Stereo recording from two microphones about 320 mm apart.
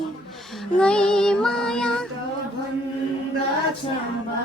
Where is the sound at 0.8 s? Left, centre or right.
Centre.